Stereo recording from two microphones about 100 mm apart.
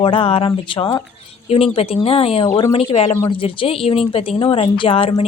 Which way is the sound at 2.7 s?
55° left (ahead or behind).